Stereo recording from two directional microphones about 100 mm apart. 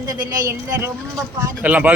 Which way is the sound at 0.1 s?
40° right (ahead or behind).